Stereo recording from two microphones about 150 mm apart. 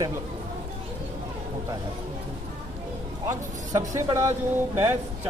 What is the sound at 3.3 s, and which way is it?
A man's voice, 20° right (ahead or behind).